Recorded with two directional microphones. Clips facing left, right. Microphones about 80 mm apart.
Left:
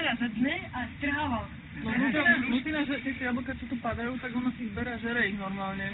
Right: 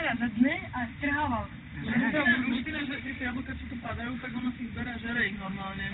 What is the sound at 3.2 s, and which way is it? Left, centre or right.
Speech, centre.